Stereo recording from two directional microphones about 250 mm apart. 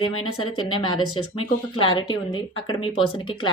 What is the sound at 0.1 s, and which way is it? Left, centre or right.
Speech, left.